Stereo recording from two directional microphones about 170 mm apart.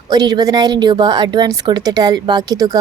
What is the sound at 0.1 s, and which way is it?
A woman's voice, 25° right (ahead or behind).